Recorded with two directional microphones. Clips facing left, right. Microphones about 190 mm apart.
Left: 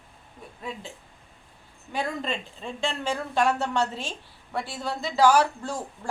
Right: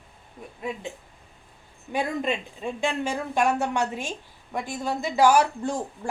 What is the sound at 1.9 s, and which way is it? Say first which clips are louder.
A woman's voice: right 3 dB; 15° right (ahead or behind).